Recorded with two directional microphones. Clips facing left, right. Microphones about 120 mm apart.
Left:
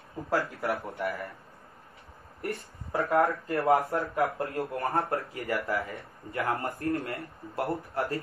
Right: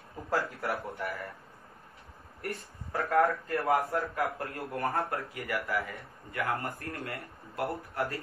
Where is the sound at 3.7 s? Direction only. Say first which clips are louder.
Left 4 dB; 25° left (ahead or behind).